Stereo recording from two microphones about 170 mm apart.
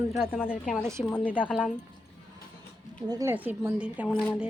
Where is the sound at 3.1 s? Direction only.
15° right (ahead or behind).